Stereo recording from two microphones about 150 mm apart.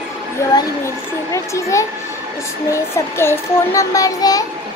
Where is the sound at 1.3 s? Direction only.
20° left (ahead or behind).